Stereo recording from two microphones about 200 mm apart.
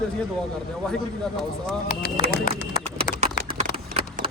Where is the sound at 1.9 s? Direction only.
40° left (ahead or behind).